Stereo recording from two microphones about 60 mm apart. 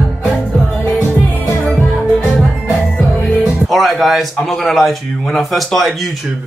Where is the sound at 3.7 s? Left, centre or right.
Centre.